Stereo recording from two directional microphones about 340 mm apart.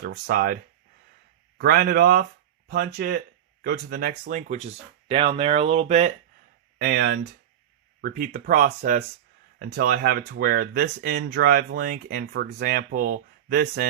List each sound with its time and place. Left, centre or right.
0.0 s speech: right